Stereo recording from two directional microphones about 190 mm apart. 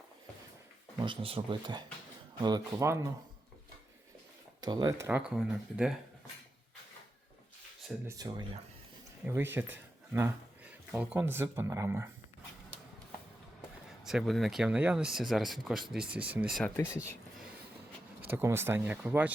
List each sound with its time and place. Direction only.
0.9 s speech: 25° right (ahead or behind)
4.6 s speech: 20° right (ahead or behind); by 6.0 s 5° right (ahead or behind)
8.0 s speech: 20° right (ahead or behind)
14.0 s speech: centre (ahead or behind)
16.7 s speech: 15° left (ahead or behind)
18.3 s speech: 10° right (ahead or behind)